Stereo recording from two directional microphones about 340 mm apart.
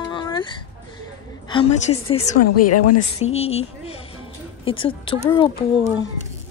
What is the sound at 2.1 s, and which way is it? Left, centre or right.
Speech, centre.